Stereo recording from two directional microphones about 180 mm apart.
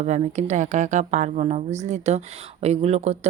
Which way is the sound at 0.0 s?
40° right (ahead or behind).